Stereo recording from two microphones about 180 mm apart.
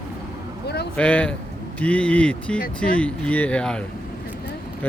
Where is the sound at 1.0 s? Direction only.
5° left (ahead or behind).